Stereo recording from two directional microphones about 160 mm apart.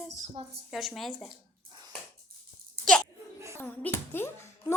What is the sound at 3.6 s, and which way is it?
Speech, 10° left (ahead or behind).